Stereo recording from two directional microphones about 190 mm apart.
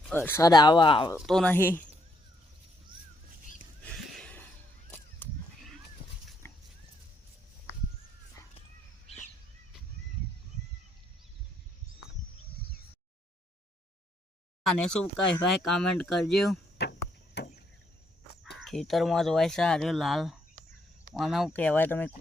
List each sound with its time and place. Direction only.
0.1 s speech: 10° left (ahead or behind)
1.2 s speech: centre (ahead or behind)
4.1 s a sound: 5° left (ahead or behind)
6.0 s dog: 25° left (ahead or behind)
14.6 s speech: 5° left (ahead or behind)
16.8 s a sound: 60° left (ahead or behind)
17.3 s chop: 55° left (ahead or behind)
18.6 s speech: centre (ahead or behind)